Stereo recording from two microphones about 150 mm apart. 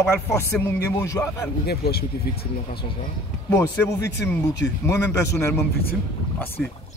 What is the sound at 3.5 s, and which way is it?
Speech, 15° left (ahead or behind).